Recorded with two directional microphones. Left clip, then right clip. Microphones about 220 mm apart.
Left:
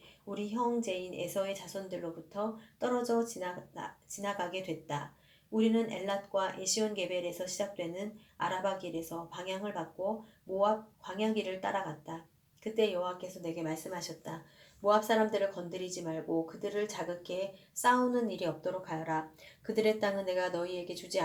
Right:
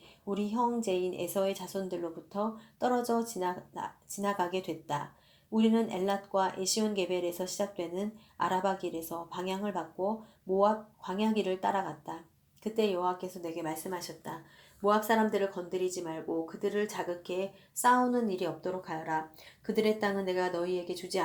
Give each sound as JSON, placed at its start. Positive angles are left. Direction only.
{"t": 0.3, "sound": "speech", "side_deg": -40}
{"t": 2.8, "sound": "speech", "side_deg": -40}
{"t": 14.8, "sound": "speech", "side_deg": -35}